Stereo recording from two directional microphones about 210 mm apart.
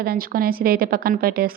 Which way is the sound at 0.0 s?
45° right (ahead or behind).